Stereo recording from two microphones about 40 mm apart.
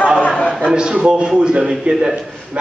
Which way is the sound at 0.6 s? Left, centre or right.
Right.